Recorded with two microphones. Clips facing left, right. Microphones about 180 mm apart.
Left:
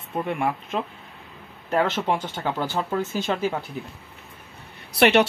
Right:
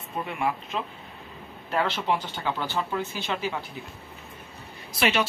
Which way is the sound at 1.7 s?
45° left (ahead or behind).